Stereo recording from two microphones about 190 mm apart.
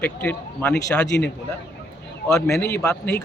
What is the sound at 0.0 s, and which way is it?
A man's voice, 10° left (ahead or behind).